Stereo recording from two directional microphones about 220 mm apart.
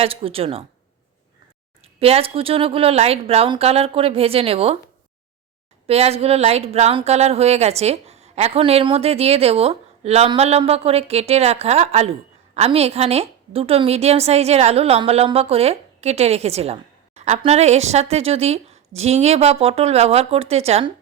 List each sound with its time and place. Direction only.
0.0 s speech: 25° right (ahead or behind)
2.0 s speech: 25° right (ahead or behind)
5.9 s speech: 25° right (ahead or behind)